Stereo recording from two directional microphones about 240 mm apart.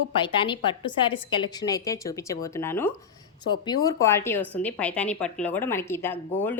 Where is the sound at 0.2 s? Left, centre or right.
Centre.